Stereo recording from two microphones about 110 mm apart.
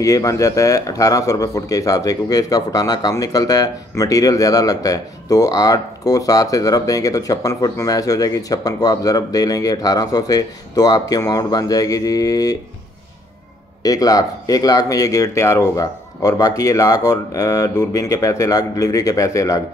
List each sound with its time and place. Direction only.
0.0 s a man's voice: 30° left (ahead or behind)
13.8 s a man's voice: 35° left (ahead or behind)